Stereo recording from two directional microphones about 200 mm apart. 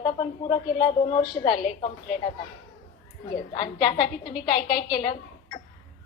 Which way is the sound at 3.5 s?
20° left (ahead or behind).